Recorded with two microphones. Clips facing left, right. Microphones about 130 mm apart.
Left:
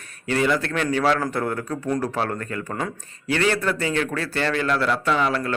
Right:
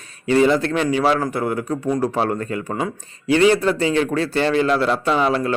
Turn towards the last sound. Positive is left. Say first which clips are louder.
# right 4 dB
turn(degrees=-20)  # may be behind; listen again after turning